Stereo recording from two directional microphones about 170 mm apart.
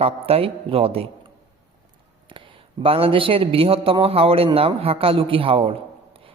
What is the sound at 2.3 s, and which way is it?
Speech, 30° right (ahead or behind).